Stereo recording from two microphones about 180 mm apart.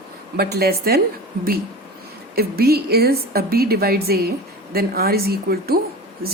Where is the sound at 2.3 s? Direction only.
60° right (ahead or behind).